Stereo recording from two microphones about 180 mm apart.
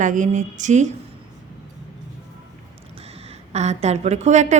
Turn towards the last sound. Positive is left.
turn(degrees=-40)  # may be behind; listen again after turning